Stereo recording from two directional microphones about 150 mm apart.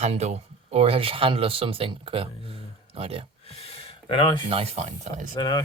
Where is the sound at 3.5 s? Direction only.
40° left (ahead or behind).